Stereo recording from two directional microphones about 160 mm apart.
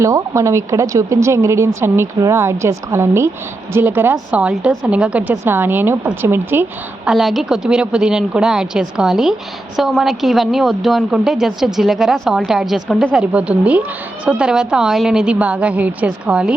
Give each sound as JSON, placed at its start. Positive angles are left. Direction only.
{"t": 0.0, "sound": "a woman's voice", "side_deg": -20}